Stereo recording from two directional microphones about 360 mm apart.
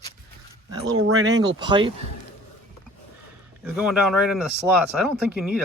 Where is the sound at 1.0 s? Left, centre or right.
Right.